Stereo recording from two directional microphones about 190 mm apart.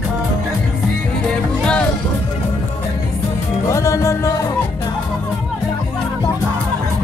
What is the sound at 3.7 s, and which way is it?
Music, 15° left (ahead or behind).